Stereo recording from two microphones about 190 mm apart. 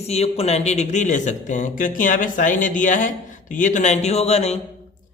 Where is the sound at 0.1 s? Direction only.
35° left (ahead or behind).